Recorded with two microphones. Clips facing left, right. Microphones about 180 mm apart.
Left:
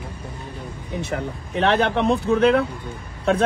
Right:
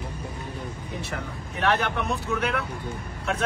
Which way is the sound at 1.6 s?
25° left (ahead or behind).